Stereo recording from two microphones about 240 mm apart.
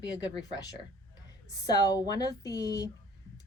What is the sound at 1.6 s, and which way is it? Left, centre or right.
A woman's voice, centre.